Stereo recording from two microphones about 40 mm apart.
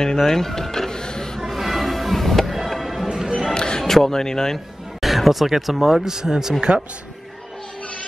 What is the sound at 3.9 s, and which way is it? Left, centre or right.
Speech, centre.